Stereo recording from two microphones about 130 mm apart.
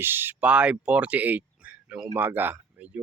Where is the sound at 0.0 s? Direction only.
15° right (ahead or behind).